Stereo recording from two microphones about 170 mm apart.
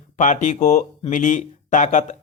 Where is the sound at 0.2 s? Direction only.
45° left (ahead or behind).